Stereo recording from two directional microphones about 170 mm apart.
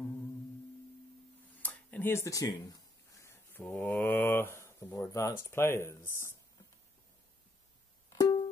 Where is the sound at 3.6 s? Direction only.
10° left (ahead or behind).